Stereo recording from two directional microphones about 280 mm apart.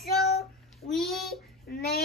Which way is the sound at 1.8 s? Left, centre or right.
Left.